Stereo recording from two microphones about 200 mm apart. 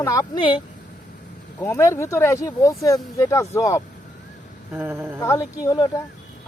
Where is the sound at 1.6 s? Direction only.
15° left (ahead or behind).